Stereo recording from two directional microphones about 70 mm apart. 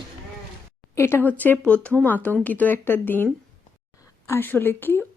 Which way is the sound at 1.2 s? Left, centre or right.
Left.